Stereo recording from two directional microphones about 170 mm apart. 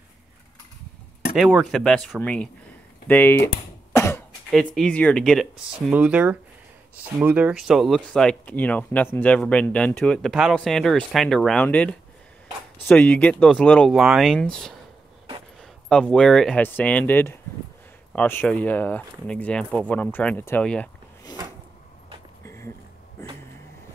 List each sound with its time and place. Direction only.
1.3 s speech: centre (ahead or behind)
3.9 s cough: 15° left (ahead or behind)
4.5 s speech: centre (ahead or behind)
15.9 s speech: 5° left (ahead or behind)
22.4 s a sound: 15° left (ahead or behind)